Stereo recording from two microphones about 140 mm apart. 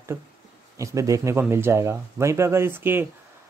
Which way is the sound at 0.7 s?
20° right (ahead or behind).